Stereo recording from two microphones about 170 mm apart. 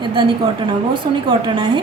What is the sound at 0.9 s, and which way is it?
Speech, 30° right (ahead or behind).